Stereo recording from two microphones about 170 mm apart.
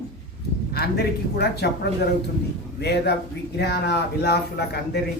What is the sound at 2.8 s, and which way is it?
A man's voice, 75° left (ahead or behind).